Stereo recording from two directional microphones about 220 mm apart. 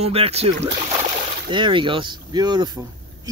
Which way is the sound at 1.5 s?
20° right (ahead or behind).